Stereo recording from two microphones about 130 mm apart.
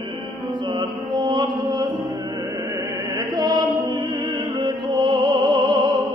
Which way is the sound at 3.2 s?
35° right (ahead or behind).